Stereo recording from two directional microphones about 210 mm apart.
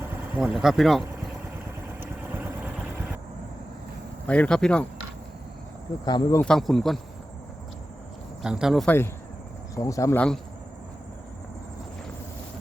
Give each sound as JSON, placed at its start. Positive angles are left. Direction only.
{"t": 0.3, "sound": "speech", "side_deg": -5}
{"t": 2.0, "sound": "vehicle", "side_deg": -10}
{"t": 4.3, "sound": "speech", "side_deg": 5}
{"t": 6.1, "sound": "speech", "side_deg": 20}
{"t": 6.4, "sound": "speech", "side_deg": 0}
{"t": 8.4, "sound": "speech", "side_deg": -5}
{"t": 9.7, "sound": "speech", "side_deg": 15}